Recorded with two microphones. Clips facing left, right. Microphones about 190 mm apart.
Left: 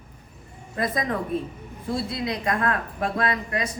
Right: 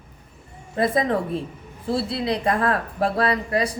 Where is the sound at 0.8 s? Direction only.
30° right (ahead or behind).